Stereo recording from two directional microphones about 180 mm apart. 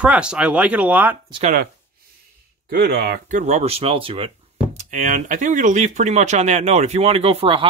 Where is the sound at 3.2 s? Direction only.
40° right (ahead or behind).